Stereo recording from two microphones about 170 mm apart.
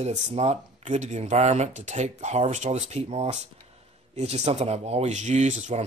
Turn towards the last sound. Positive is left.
turn(degrees=-45)  # may be behind; listen again after turning